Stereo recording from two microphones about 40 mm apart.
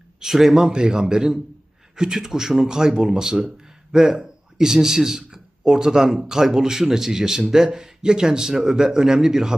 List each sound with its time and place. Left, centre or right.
0.2 s a man's voice: centre
0.7 s a man's voice: centre